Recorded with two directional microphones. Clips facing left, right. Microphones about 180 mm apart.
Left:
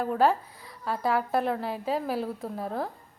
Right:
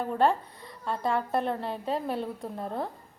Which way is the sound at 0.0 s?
5° left (ahead or behind).